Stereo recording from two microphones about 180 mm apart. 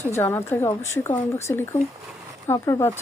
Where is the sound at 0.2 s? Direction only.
15° left (ahead or behind).